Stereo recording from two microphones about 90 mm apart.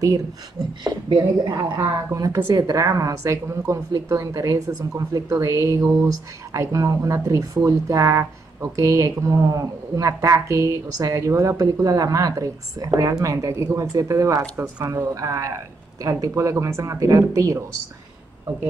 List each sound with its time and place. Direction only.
0.8 s a woman's voice: 55° right (ahead or behind); by 17.6 s 35° right (ahead or behind)